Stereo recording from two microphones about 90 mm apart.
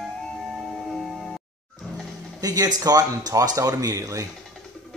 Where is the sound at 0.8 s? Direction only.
Centre (ahead or behind).